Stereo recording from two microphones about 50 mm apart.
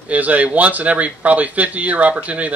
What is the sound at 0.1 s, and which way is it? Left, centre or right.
Speech, right.